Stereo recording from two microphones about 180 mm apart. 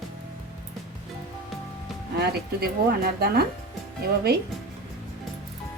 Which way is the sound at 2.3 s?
60° right (ahead or behind).